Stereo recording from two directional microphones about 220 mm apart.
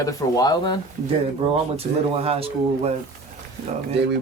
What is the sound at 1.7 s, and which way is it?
Speech, 25° right (ahead or behind).